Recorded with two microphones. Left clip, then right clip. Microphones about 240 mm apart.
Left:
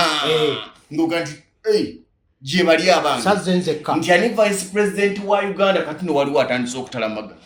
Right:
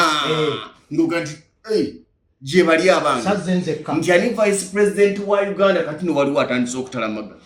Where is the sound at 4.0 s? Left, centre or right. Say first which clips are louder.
Even; left.